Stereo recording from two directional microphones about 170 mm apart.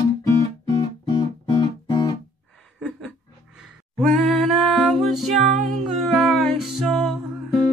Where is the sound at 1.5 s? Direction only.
20° left (ahead or behind).